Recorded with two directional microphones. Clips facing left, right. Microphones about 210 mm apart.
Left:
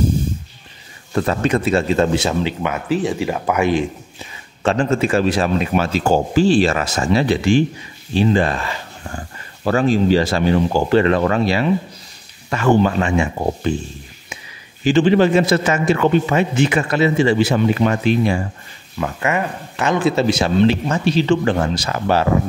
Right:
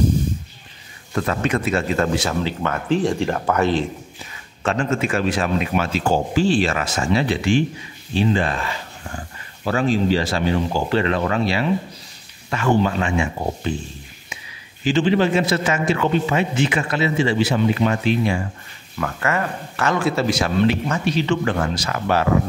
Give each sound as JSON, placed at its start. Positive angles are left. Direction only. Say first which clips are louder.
{"t": 1.1, "sound": "speech", "louder": "left 4 dB", "side_deg": 30}
{"t": 2.6, "sound": "speech", "louder": "even", "side_deg": 5}
{"t": 4.6, "sound": "speech", "louder": "left 4 dB", "side_deg": 35}
{"t": 9.7, "sound": "speech", "louder": "left 4 dB", "side_deg": 45}
{"t": 14.9, "sound": "speech", "louder": "left 4 dB", "side_deg": 50}
{"t": 18.9, "sound": "speech", "louder": "left 2 dB", "side_deg": 20}